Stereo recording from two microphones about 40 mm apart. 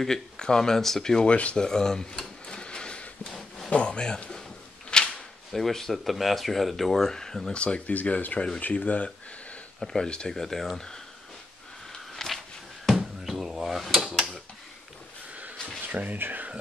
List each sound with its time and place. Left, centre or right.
0.0 s speech: centre
1.3 s speech: left
1.6 s drawer open or close: centre
3.3 s a sound: centre
3.7 s speech: left
4.9 s a sound: left
5.5 s speech: centre
7.5 s speech: left
9.9 s speech: centre
11.9 s a sound: centre
12.8 s a sound: centre
15.9 s speech: right
16.2 s speech: right